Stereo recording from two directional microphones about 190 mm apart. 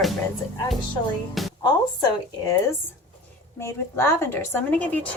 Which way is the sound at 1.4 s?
Centre (ahead or behind).